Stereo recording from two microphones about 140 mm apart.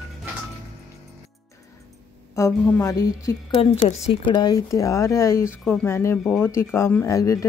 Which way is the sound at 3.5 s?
45° left (ahead or behind).